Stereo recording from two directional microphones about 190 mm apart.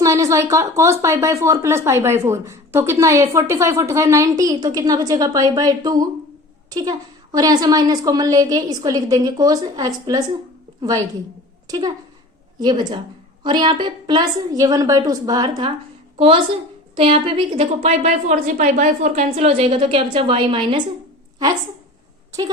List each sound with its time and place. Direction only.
0.0 s a woman's voice: 15° right (ahead or behind)
17.8 s a woman's voice: 40° right (ahead or behind)